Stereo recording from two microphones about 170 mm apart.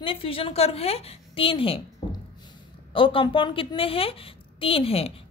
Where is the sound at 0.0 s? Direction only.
30° left (ahead or behind).